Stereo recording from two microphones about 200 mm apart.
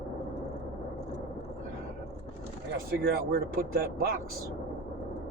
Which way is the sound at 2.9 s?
50° right (ahead or behind).